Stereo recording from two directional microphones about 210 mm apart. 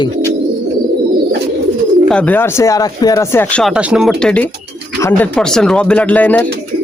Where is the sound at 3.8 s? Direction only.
5° right (ahead or behind).